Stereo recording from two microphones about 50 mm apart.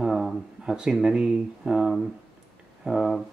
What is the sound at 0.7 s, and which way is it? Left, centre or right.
Speech, centre.